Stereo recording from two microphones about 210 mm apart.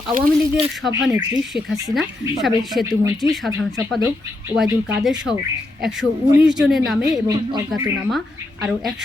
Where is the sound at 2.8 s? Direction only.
15° right (ahead or behind).